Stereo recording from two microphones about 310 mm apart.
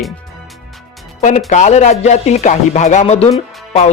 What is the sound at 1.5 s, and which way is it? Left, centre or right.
Speech, left.